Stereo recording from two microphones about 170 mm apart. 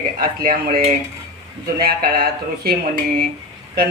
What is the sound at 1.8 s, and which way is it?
Speech, 60° right (ahead or behind).